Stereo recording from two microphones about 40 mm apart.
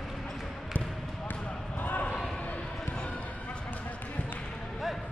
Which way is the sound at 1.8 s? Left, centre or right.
Left.